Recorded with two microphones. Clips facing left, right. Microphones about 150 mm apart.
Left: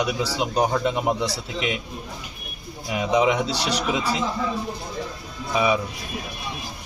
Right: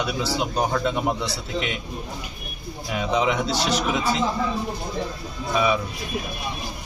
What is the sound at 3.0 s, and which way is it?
Speech, 10° left (ahead or behind).